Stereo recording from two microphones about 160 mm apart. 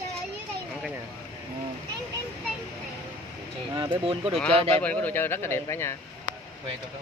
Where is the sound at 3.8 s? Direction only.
30° right (ahead or behind).